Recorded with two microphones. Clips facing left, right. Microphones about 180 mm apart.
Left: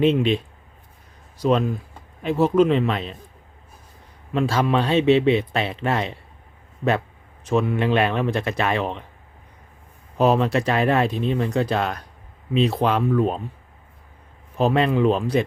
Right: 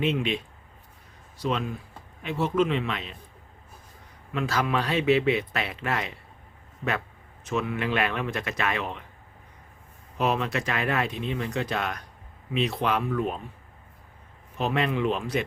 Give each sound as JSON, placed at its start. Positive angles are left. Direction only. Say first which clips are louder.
{"t": 0.0, "sound": "speech", "louder": "left 8 dB", "side_deg": 35}
{"t": 4.4, "sound": "speech", "louder": "left 6 dB", "side_deg": 30}
{"t": 7.4, "sound": "speech", "louder": "left 7 dB", "side_deg": 30}
{"t": 10.2, "sound": "speech", "louder": "left 8 dB", "side_deg": 35}
{"t": 14.6, "sound": "speech", "louder": "left 7 dB", "side_deg": 35}